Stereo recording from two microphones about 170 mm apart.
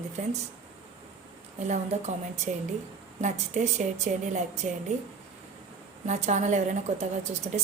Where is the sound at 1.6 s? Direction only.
45° right (ahead or behind).